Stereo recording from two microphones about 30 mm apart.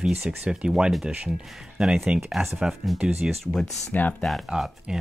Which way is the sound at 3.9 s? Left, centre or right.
Left.